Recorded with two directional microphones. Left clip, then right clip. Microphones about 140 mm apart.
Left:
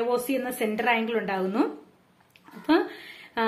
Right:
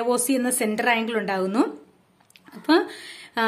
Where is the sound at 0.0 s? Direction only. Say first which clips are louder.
Right 3 dB; 40° right (ahead or behind).